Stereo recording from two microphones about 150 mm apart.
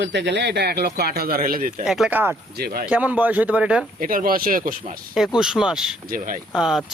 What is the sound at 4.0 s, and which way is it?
Speech, 70° right (ahead or behind).